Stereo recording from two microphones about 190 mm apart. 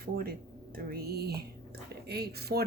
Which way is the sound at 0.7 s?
55° right (ahead or behind).